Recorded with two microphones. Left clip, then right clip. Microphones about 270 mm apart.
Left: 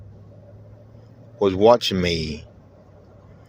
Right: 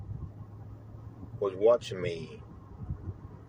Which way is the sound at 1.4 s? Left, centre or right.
Left.